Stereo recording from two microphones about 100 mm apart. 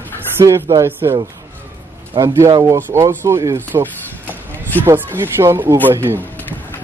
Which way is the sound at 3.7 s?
40° right (ahead or behind).